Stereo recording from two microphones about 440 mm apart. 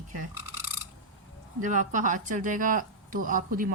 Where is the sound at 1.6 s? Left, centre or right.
Centre.